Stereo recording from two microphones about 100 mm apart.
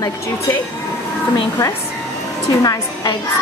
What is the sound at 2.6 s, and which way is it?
Speech, 40° left (ahead or behind).